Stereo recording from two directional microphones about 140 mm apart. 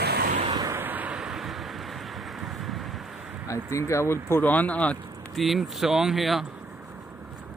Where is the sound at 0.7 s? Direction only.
15° right (ahead or behind).